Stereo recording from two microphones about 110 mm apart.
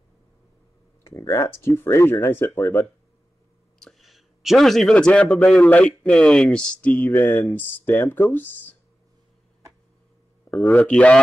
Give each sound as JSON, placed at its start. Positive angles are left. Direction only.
{"t": 1.0, "sound": "speech", "side_deg": 30}
{"t": 3.8, "sound": "speech", "side_deg": 0}
{"t": 10.8, "sound": "speech", "side_deg": 10}